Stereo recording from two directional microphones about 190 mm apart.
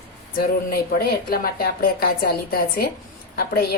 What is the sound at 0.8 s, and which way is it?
A woman's voice, 55° left (ahead or behind).